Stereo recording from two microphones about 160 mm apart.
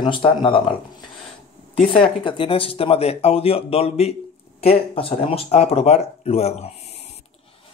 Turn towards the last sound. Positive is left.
turn(degrees=40)  # may be behind; listen again after turning